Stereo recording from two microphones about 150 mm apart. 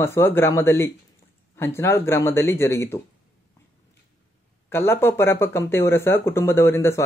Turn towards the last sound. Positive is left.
turn(degrees=20)  # may be behind; listen again after turning